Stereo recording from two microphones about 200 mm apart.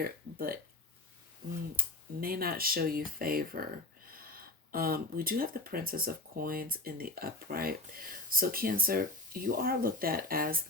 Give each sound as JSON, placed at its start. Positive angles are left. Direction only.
{"t": 0.0, "sound": "speech", "side_deg": -50}
{"t": 2.2, "sound": "speech", "side_deg": -50}